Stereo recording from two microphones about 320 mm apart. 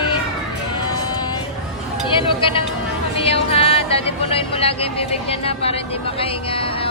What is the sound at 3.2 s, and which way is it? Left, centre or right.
Speech, centre.